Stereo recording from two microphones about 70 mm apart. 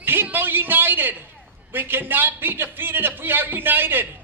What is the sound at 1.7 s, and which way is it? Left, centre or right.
Speech, right.